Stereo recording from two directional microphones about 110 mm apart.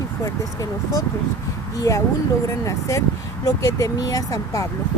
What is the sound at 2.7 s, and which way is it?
Speech, 30° left (ahead or behind).